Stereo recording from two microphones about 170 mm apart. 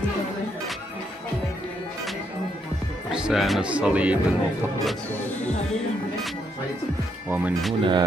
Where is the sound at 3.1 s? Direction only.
Centre (ahead or behind).